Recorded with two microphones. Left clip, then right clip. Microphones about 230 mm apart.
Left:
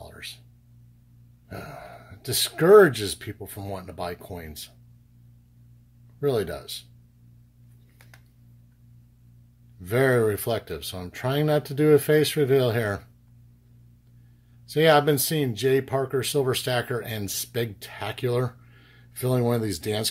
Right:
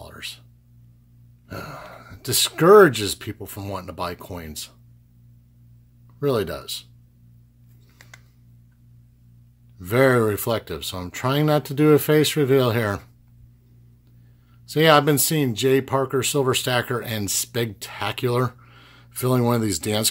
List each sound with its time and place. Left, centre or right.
0.0 s a sound: right
1.5 s speech: right
6.1 s speech: right
9.8 s speech: right
14.7 s speech: right